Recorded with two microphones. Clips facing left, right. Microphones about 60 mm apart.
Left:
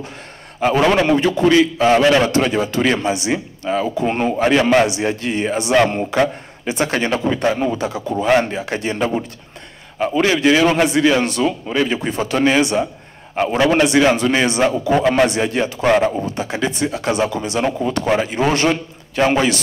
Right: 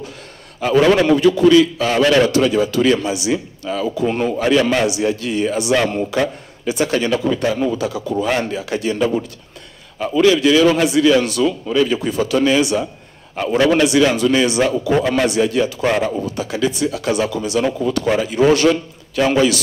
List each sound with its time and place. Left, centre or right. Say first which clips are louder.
0.6 s a man's voice: right 1 dB; left
2.2 s speech: right 2 dB; left